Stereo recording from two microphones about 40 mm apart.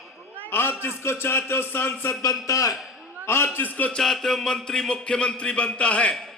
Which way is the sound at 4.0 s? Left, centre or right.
Centre.